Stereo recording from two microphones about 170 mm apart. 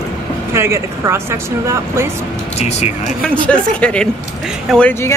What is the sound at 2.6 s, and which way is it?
Speech, 40° left (ahead or behind).